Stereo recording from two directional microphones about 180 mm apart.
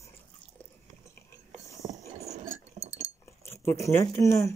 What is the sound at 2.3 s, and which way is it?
Chink, 35° right (ahead or behind).